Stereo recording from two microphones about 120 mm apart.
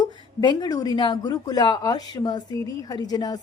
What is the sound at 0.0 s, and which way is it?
A woman's voice, 35° left (ahead or behind).